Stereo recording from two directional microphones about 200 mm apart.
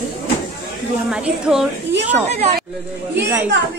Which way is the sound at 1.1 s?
5° right (ahead or behind).